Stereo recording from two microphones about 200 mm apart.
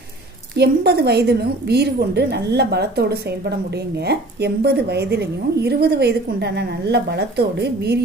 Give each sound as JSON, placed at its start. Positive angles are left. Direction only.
{"t": 0.6, "sound": "a woman's voice", "side_deg": -55}